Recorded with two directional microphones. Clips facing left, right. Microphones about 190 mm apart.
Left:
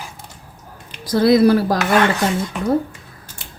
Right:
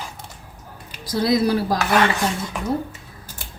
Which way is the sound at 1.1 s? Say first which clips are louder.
Left 6 dB; 60° left (ahead or behind).